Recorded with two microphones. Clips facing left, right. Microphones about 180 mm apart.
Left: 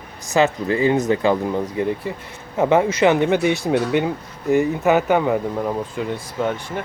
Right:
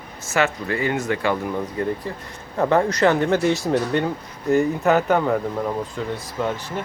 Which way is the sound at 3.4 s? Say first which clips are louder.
Left 1 dB; centre (ahead or behind).